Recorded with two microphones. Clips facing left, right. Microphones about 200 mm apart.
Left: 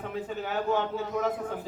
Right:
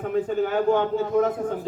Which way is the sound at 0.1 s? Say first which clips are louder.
Right 11 dB; 50° right (ahead or behind).